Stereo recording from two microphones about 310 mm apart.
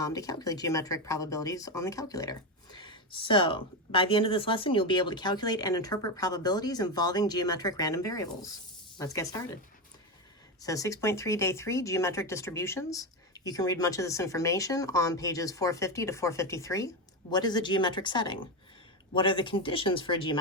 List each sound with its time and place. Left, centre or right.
0.0 s speech: centre
10.6 s speech: centre